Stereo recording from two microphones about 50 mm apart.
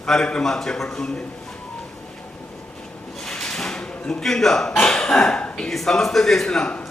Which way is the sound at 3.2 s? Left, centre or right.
Centre.